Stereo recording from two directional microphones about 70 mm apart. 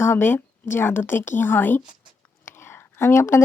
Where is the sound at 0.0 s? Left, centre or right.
Left.